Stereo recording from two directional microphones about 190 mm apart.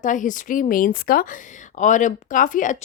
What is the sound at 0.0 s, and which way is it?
A woman's voice, 40° left (ahead or behind).